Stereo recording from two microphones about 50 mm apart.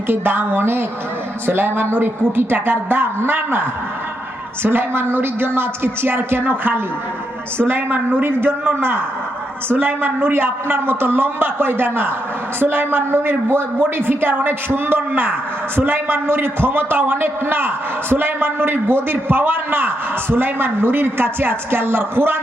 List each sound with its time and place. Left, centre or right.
0.1 s a woman's voice: right